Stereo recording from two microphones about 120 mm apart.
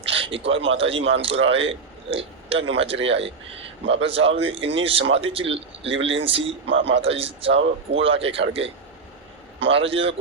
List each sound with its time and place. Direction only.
0.1 s speech: 50° right (ahead or behind)